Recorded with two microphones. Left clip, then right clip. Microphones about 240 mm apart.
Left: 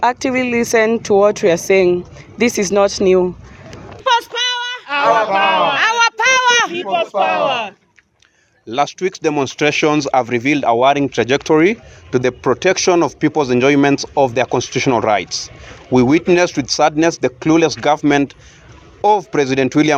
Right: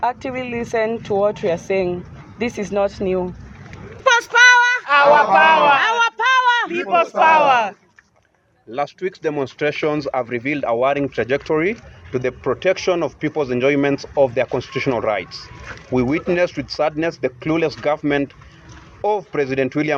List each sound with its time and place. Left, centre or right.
0.0 s speech: left
4.0 s a sound: centre
5.3 s speech: centre
5.7 s a sound: left
6.7 s speech: centre
8.7 s speech: left